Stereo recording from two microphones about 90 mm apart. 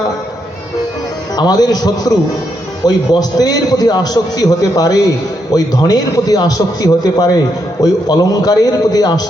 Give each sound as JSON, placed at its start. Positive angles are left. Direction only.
{"t": 1.4, "sound": "a man's voice", "side_deg": 50}